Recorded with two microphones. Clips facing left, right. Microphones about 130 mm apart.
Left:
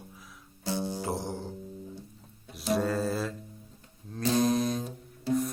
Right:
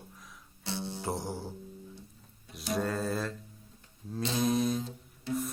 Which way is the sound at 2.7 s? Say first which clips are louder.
Left 2 dB; centre (ahead or behind).